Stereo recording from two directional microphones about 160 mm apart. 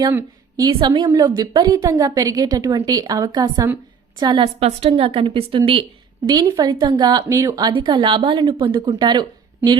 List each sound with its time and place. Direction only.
0.1 s a sound: 15° right (ahead or behind)
0.6 s speech: 25° right (ahead or behind)
4.6 s a woman's voice: 35° right (ahead or behind)